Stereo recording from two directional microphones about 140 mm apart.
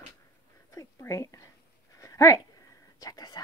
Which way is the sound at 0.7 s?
20° left (ahead or behind).